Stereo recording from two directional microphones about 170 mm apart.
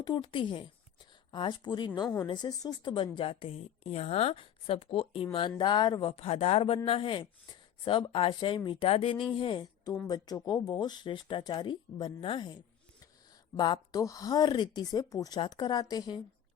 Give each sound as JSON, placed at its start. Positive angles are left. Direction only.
{"t": 0.0, "sound": "a woman's voice", "side_deg": 30}
{"t": 13.6, "sound": "speech", "side_deg": 25}